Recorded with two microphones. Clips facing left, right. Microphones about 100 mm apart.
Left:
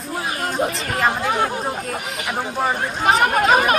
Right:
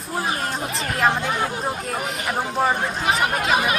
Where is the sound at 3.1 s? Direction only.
40° left (ahead or behind).